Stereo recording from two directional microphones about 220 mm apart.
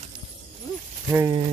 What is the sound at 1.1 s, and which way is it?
Speech, 20° right (ahead or behind).